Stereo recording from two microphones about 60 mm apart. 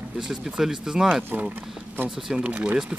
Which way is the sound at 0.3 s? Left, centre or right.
Centre.